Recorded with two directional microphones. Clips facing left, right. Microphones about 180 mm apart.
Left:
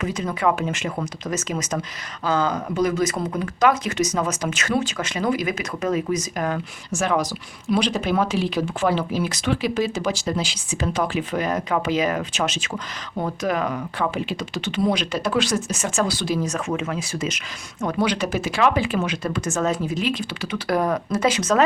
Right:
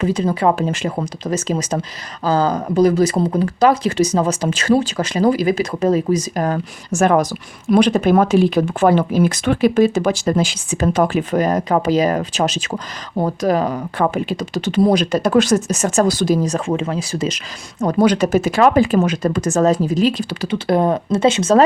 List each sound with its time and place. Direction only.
0.0 s speech: 30° right (ahead or behind)
20.7 s speech: 25° right (ahead or behind)